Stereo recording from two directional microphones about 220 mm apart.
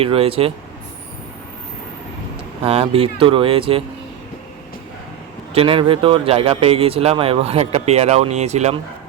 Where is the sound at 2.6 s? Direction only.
25° right (ahead or behind).